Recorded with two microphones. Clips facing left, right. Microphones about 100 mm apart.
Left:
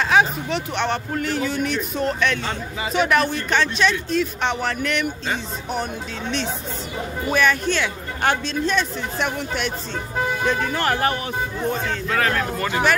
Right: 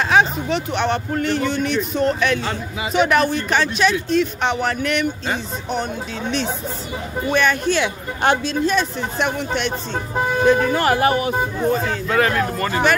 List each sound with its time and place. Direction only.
0.1 s speech: centre (ahead or behind)
7.2 s speech: centre (ahead or behind)
7.7 s speech: 20° right (ahead or behind)
8.5 s speech: 5° right (ahead or behind)
10.4 s speech: 5° right (ahead or behind)